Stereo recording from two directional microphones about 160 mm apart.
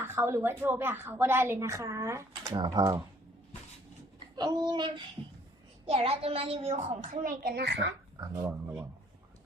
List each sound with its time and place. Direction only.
0.0 s a woman's voice: 15° right (ahead or behind)
4.4 s a child's voice: 25° right (ahead or behind)
5.8 s a child's voice: 40° right (ahead or behind); by 7.8 s 85° right
8.2 s a child's voice: 25° right (ahead or behind)